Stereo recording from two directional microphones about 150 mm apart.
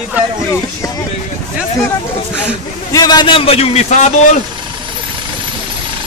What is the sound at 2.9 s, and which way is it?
A man's voice, 25° left (ahead or behind).